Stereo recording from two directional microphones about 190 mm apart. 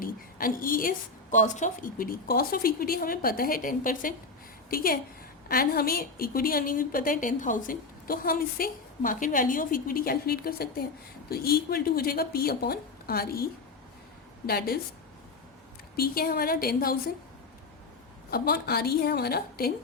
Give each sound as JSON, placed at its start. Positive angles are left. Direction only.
{"t": 0.0, "sound": "a woman's voice", "side_deg": 50}
{"t": 16.0, "sound": "a woman's voice", "side_deg": 50}
{"t": 18.3, "sound": "a woman's voice", "side_deg": 55}